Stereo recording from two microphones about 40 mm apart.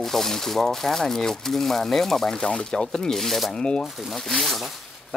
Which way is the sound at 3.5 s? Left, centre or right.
Left.